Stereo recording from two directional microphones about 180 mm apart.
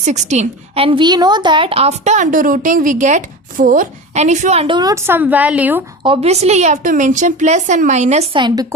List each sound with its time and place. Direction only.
0.0 s a woman's voice: 40° right (ahead or behind); by 5.8 s 10° right (ahead or behind)
6.0 s a woman's voice: 30° right (ahead or behind)